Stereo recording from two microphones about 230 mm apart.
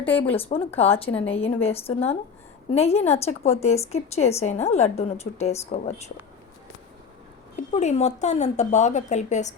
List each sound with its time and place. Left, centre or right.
0.0 s speech: centre
0.3 s a woman's voice: left
7.5 s a woman's voice: left